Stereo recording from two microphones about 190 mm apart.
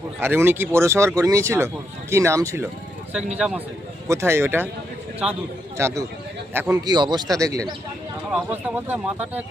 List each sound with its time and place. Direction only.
0.2 s a man's voice: 10° right (ahead or behind)
5.2 s a man's voice: centre (ahead or behind)
5.7 s speech: 15° right (ahead or behind)
8.3 s speech: 5° right (ahead or behind)